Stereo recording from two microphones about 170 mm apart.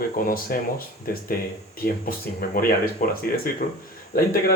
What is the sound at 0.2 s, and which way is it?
Speech, 55° left (ahead or behind).